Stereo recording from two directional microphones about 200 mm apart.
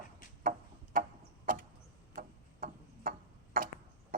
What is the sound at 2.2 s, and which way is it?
Clock, 45° right (ahead or behind).